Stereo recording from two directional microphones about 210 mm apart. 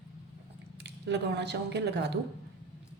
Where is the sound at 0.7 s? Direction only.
55° right (ahead or behind).